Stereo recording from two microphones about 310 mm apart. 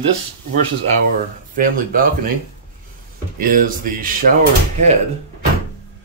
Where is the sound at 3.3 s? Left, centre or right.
Right.